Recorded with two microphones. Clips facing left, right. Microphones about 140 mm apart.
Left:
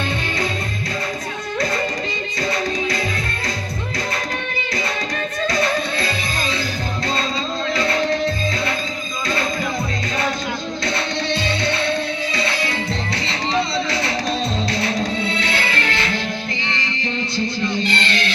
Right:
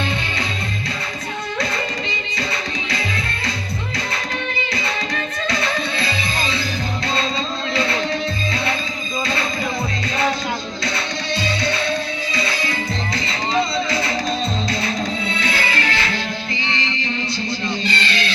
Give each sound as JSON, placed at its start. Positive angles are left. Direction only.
{"t": 10.8, "sound": "music", "side_deg": 55}
{"t": 11.4, "sound": "music", "side_deg": 25}
{"t": 15.5, "sound": "music", "side_deg": 55}